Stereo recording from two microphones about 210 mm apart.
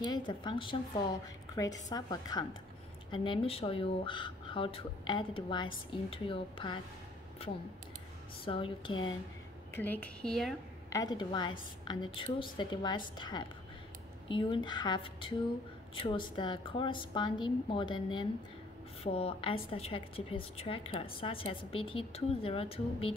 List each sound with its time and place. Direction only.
0.1 s a woman's voice: 20° left (ahead or behind)
8.5 s a woman's voice: 25° left (ahead or behind)
9.7 s a woman's voice: 10° left (ahead or behind)
10.9 s a woman's voice: 20° left (ahead or behind)